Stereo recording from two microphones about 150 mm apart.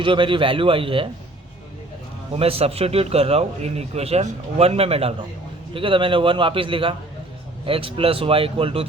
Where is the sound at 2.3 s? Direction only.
40° right (ahead or behind).